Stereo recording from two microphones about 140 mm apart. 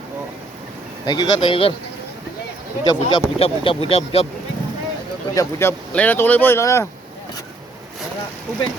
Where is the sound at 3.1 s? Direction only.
40° left (ahead or behind).